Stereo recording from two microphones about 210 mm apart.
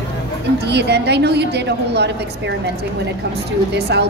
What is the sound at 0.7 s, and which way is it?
A woman's voice, 55° right (ahead or behind).